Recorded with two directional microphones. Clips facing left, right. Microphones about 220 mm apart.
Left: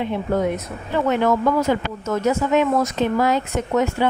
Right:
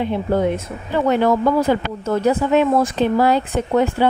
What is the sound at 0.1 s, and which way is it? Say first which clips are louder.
Speech: right 2 dB; 30° right (ahead or behind).